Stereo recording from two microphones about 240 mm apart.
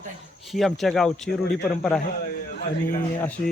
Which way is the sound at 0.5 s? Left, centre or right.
Centre.